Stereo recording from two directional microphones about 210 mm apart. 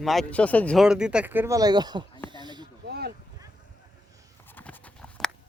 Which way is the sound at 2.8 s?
50° right (ahead or behind).